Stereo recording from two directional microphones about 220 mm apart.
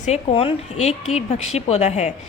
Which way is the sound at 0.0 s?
30° left (ahead or behind).